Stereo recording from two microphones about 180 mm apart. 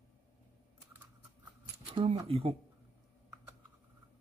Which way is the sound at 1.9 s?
30° right (ahead or behind).